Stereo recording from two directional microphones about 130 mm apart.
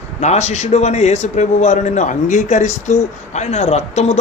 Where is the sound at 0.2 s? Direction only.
60° left (ahead or behind).